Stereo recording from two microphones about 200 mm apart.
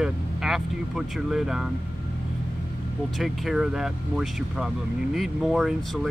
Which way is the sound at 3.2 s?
Centre (ahead or behind).